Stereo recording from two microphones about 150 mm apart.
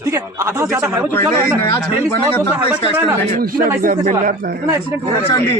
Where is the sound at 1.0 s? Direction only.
15° left (ahead or behind).